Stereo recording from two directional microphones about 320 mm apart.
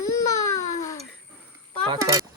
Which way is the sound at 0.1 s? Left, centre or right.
Left.